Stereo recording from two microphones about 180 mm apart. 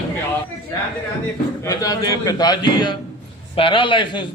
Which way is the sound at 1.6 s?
20° left (ahead or behind).